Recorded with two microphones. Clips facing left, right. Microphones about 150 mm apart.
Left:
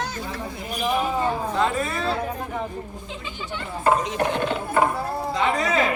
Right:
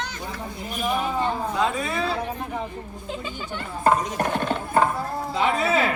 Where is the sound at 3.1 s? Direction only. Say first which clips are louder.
Right 2 dB; 45° right (ahead or behind).